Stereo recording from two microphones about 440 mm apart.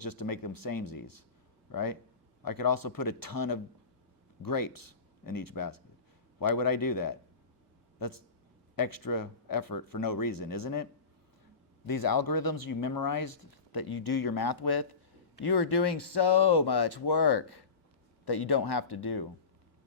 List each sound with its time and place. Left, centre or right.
0.0 s speech: left
11.9 s speech: left